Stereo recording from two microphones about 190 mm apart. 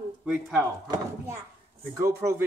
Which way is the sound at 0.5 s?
15° right (ahead or behind).